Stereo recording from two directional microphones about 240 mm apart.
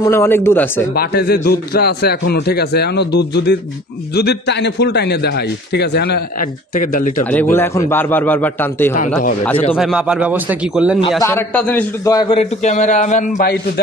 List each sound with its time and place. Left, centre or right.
0.0 s a man's voice: centre
0.9 s a man's voice: left
7.5 s a man's voice: centre
11.2 s a man's voice: centre; by 13.5 s left